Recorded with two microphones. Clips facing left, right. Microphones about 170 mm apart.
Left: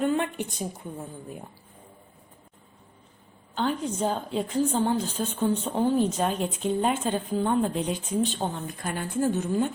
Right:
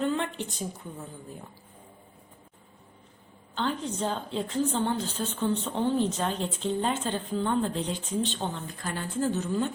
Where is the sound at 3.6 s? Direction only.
10° left (ahead or behind).